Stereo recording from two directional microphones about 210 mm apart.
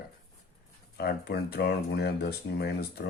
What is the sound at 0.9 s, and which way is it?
Speech, 50° left (ahead or behind).